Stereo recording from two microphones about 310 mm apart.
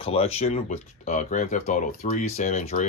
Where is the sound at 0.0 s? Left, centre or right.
Centre.